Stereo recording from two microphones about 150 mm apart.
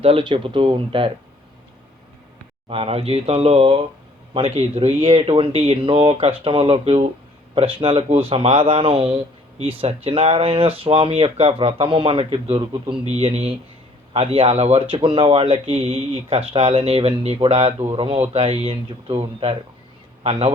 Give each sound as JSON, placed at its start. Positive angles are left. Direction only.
{"t": 0.0, "sound": "speech", "side_deg": -35}
{"t": 2.6, "sound": "speech", "side_deg": -40}